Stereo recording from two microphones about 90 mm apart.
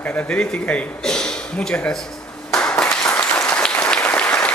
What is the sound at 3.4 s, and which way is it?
Applause, 10° left (ahead or behind).